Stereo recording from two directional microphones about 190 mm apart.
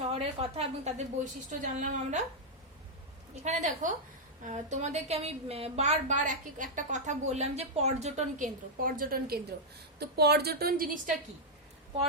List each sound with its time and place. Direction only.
0.1 s a woman's voice: 30° right (ahead or behind)
3.4 s a woman's voice: 35° right (ahead or behind)